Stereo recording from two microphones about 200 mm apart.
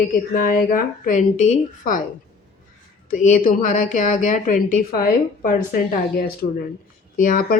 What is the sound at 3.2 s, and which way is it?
Speech, 45° left (ahead or behind).